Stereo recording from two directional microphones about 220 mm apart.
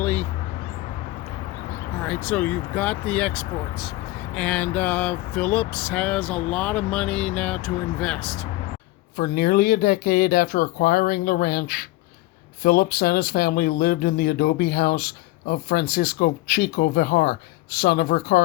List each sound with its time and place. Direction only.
0.0 s a sound: 10° left (ahead or behind)
2.0 s speech: 5° left (ahead or behind)
9.1 s speech: 40° left (ahead or behind)